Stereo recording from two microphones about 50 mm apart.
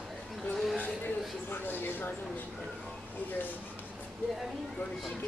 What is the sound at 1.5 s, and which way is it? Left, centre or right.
Speech, left.